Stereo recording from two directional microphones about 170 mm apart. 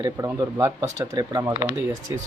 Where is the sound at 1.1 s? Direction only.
25° right (ahead or behind).